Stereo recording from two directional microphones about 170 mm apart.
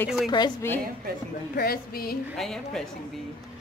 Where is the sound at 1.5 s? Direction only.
65° left (ahead or behind).